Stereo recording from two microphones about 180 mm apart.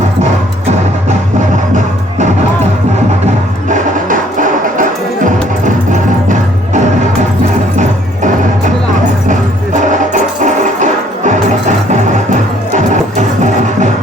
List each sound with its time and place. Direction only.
3.7 s music: 45° right (ahead or behind)
10.1 s music: 45° right (ahead or behind)
12.7 s music: 40° right (ahead or behind)